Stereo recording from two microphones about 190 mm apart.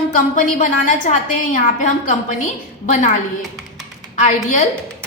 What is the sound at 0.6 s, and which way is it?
A woman's voice, 40° left (ahead or behind).